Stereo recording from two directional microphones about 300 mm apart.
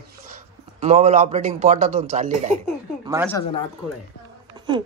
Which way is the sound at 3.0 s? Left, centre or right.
Centre.